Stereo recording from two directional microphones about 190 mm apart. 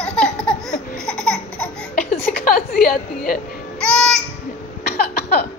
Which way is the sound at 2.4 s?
50° left (ahead or behind).